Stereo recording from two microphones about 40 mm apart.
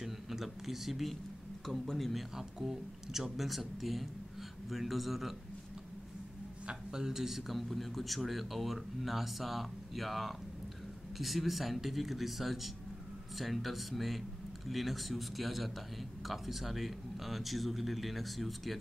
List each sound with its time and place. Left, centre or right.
0.0 s a man's voice: centre
2.3 s a man's voice: centre
6.7 s a man's voice: centre